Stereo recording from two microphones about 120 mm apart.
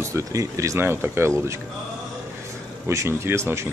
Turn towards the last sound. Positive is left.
turn(degrees=-20)  # may be behind; listen again after turning